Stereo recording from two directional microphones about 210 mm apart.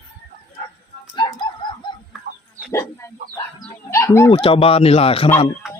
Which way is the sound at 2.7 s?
10° left (ahead or behind).